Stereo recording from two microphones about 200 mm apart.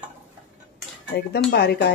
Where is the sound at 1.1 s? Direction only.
60° left (ahead or behind).